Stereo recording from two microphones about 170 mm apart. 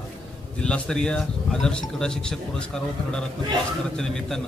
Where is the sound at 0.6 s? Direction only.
5° left (ahead or behind).